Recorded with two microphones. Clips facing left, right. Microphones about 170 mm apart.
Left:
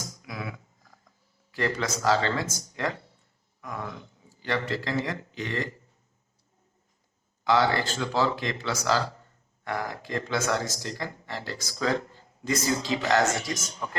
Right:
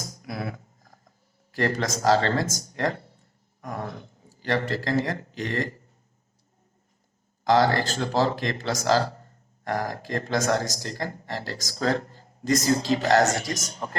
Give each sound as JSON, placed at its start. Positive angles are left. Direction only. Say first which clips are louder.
{"t": 0.0, "sound": "a sound", "louder": "right 4 dB", "side_deg": -40}
{"t": 1.5, "sound": "a man's voice", "louder": "right 3 dB", "side_deg": -40}
{"t": 7.4, "sound": "speech", "louder": "right 3 dB", "side_deg": -40}